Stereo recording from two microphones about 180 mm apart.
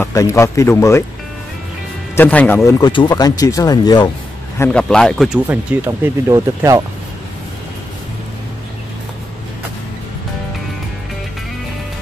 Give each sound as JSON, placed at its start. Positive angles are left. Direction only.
{"t": 0.0, "sound": "speech", "side_deg": 15}
{"t": 2.1, "sound": "speech", "side_deg": 10}
{"t": 2.9, "sound": "speech", "side_deg": 25}
{"t": 4.6, "sound": "speech", "side_deg": 5}
{"t": 5.5, "sound": "speech", "side_deg": -10}